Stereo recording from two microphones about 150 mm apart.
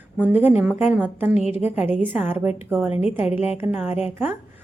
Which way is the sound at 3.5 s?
15° right (ahead or behind).